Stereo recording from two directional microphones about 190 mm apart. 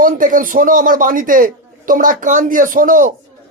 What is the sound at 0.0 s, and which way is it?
Speech, 45° right (ahead or behind).